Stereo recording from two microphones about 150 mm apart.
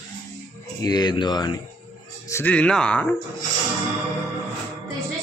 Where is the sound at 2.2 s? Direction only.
15° left (ahead or behind).